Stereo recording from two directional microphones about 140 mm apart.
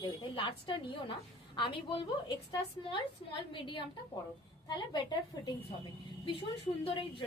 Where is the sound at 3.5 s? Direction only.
35° left (ahead or behind).